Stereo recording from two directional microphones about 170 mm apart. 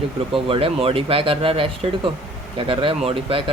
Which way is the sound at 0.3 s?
30° right (ahead or behind).